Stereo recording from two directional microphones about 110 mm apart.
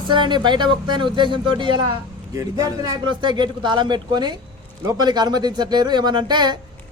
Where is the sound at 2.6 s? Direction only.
35° right (ahead or behind).